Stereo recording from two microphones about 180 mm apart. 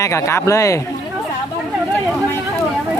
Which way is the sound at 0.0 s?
15° left (ahead or behind).